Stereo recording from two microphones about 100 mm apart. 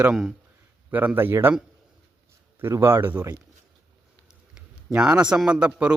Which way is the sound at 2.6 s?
25° right (ahead or behind).